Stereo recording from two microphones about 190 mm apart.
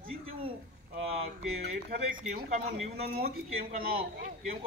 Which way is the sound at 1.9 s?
50° right (ahead or behind).